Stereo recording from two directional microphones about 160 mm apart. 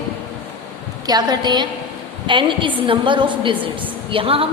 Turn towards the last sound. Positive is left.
turn(degrees=-35)  # may be behind; listen again after turning